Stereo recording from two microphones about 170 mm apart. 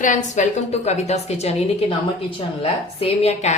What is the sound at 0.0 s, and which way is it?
A woman's voice, 45° left (ahead or behind).